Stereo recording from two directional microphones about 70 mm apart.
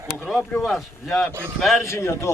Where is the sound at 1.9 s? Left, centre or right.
Left.